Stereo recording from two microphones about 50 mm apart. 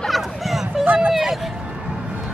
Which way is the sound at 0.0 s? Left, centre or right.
Centre.